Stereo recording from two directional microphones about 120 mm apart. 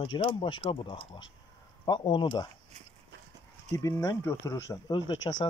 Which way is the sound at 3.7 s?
25° left (ahead or behind).